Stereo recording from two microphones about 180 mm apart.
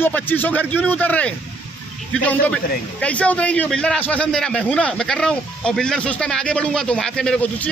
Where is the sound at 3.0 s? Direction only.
5° left (ahead or behind).